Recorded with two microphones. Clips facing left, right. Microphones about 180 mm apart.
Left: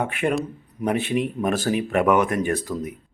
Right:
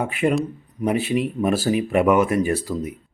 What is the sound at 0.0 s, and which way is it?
A man's voice, centre (ahead or behind).